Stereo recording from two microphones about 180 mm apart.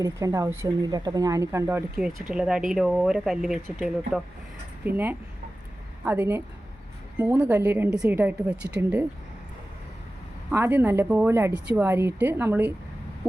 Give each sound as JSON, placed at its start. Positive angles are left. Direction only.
{"t": 0.0, "sound": "a woman's voice", "side_deg": -15}
{"t": 10.5, "sound": "a woman's voice", "side_deg": -10}